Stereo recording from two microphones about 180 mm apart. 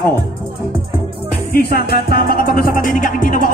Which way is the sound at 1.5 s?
60° left (ahead or behind).